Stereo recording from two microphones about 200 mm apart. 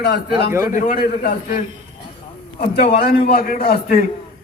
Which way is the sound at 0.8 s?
45° left (ahead or behind).